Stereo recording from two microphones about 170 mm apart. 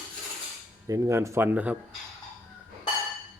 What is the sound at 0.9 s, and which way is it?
Speech, 20° right (ahead or behind).